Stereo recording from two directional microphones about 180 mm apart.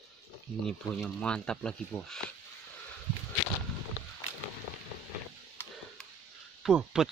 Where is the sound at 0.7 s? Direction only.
5° left (ahead or behind).